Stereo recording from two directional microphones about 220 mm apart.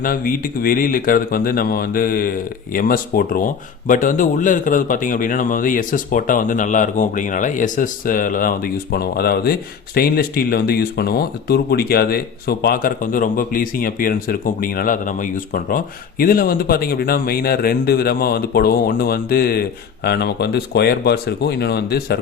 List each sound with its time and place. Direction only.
0.0 s speech: 40° left (ahead or behind)